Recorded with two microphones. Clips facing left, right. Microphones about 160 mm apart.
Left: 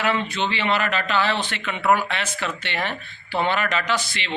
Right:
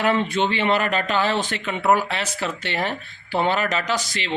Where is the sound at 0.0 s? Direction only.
50° right (ahead or behind).